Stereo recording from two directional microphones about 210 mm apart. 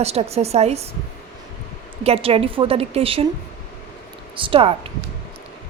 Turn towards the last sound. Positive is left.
turn(degrees=-25)  # may be behind; listen again after turning